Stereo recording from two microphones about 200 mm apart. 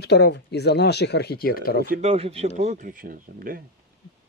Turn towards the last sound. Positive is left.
turn(degrees=-45)  # may be behind; listen again after turning